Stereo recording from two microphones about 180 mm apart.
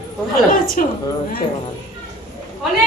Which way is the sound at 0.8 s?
50° left (ahead or behind).